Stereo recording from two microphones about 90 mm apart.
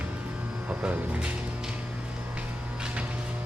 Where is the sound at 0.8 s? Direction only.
15° right (ahead or behind).